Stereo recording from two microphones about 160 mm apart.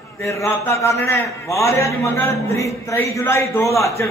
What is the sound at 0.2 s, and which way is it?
A man's voice, 20° left (ahead or behind).